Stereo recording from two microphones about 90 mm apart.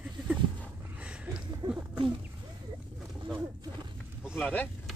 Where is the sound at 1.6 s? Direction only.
50° right (ahead or behind).